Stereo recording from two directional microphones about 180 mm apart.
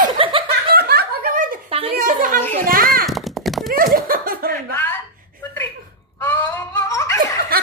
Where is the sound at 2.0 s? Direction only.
50° right (ahead or behind).